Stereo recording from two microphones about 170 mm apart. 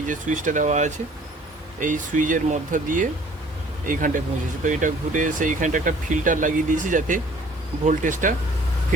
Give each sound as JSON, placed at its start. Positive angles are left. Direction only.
{"t": 0.0, "sound": "speech", "side_deg": -50}